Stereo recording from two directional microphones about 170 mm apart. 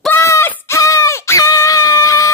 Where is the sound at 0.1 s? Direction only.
15° left (ahead or behind).